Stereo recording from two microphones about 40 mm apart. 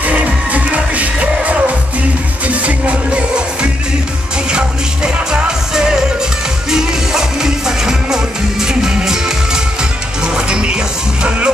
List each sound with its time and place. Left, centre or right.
0.0 s music: right
4.5 s music: right
10.3 s music: right